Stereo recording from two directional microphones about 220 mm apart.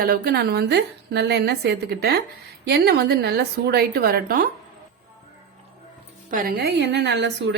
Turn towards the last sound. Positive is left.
turn(degrees=-50)  # may be behind; listen again after turning